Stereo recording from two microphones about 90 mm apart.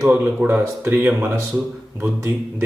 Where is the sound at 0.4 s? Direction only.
20° right (ahead or behind).